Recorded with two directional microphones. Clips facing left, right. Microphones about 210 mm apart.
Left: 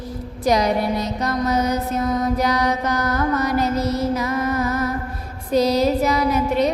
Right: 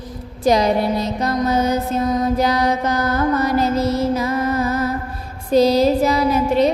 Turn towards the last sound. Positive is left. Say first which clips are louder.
# right 3 dB
turn(degrees=-30)  # may be behind; listen again after turning